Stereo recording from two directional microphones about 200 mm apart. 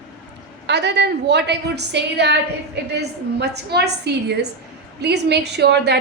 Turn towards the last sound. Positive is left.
turn(degrees=-55)  # may be behind; listen again after turning